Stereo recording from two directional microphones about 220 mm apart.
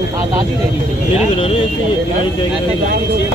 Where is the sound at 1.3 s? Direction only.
25° left (ahead or behind).